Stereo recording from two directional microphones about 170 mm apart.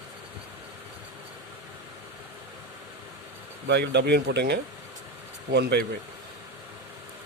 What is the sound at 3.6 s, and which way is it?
A man's voice, 90° right.